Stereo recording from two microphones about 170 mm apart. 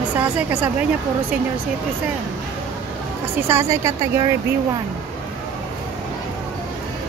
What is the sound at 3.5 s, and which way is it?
Speech, 15° right (ahead or behind).